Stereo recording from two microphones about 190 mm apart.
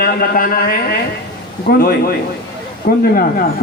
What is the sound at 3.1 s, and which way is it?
Speech, 50° left (ahead or behind).